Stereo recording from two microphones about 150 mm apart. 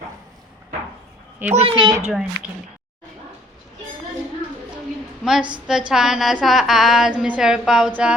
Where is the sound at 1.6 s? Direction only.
30° right (ahead or behind).